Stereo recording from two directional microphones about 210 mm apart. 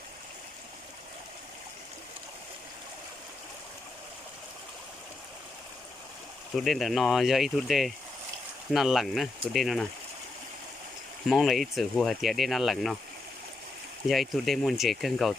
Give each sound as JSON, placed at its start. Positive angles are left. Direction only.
{"t": 6.6, "sound": "speech", "side_deg": 0}
{"t": 11.3, "sound": "speech", "side_deg": 0}
{"t": 14.1, "sound": "speech", "side_deg": 0}